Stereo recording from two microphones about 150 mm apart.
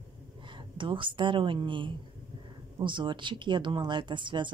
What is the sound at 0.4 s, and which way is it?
A woman's voice, 35° right (ahead or behind).